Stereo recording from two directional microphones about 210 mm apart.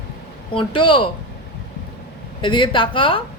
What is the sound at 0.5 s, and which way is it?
Speech, 25° left (ahead or behind).